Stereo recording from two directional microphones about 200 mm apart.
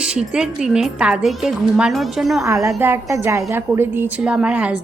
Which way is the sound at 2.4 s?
15° right (ahead or behind).